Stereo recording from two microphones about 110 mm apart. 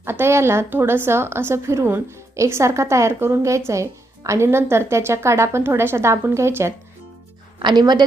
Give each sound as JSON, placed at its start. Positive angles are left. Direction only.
{"t": 0.0, "sound": "a woman's voice", "side_deg": -20}
{"t": 7.6, "sound": "speech", "side_deg": -40}